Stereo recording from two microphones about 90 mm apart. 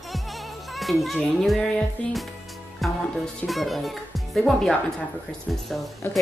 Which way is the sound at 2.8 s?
Centre (ahead or behind).